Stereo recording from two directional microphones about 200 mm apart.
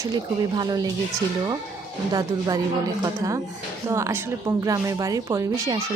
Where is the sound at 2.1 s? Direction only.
20° right (ahead or behind).